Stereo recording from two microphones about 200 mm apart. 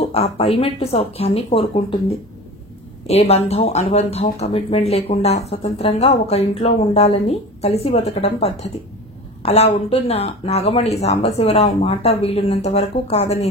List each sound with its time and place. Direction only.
0.0 s a woman's voice: 30° left (ahead or behind)
3.1 s speech: 30° left (ahead or behind)